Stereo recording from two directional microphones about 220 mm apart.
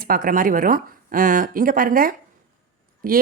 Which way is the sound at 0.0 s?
40° right (ahead or behind).